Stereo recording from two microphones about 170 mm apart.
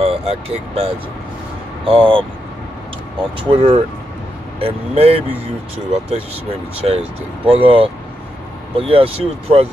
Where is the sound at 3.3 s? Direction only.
35° right (ahead or behind).